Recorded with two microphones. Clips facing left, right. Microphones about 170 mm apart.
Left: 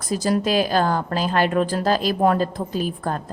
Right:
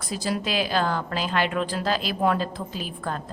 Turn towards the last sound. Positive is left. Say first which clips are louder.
# left 6 dB
turn(degrees=45)  # may be behind; listen again after turning